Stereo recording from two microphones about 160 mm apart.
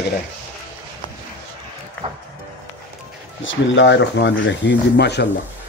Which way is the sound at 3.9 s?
90° left.